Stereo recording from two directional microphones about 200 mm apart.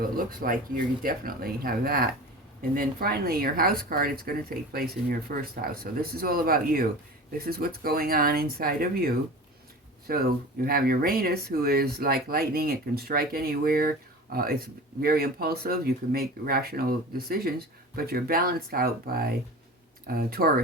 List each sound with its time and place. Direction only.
0.2 s speech: 45° right (ahead or behind)